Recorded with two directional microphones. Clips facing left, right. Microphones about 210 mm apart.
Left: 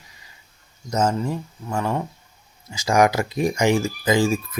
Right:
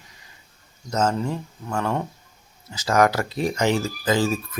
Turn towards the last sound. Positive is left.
turn(degrees=10)  # may be behind; listen again after turning